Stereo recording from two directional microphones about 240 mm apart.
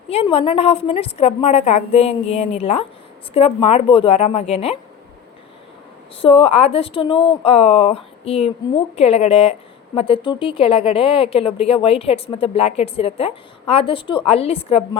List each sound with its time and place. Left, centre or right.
0.1 s a woman's voice: left
6.2 s a woman's voice: left